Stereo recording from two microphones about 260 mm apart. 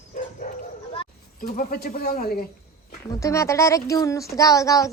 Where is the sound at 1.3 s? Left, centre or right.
Left.